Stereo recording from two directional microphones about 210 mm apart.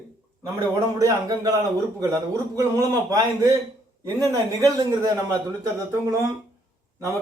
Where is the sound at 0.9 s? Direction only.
15° right (ahead or behind).